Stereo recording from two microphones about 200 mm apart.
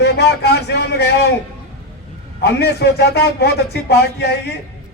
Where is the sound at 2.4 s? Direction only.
55° left (ahead or behind).